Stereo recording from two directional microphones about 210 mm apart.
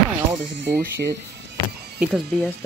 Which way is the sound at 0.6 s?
50° right (ahead or behind).